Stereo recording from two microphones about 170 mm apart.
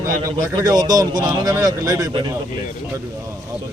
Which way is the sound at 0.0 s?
20° right (ahead or behind).